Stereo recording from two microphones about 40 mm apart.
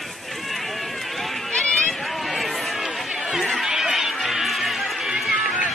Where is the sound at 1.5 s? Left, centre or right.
Left.